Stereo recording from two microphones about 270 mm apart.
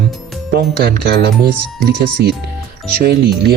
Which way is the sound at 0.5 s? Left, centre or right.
Right.